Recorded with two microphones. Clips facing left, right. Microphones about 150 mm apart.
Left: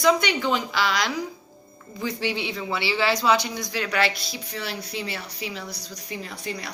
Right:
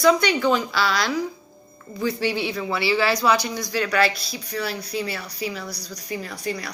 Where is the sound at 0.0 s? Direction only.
20° left (ahead or behind).